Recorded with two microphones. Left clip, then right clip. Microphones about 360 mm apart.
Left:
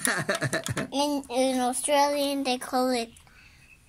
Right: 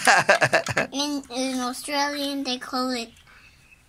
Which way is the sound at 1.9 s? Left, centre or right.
Centre.